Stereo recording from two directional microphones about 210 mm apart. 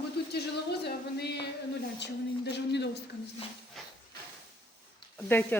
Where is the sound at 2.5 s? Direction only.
55° left (ahead or behind).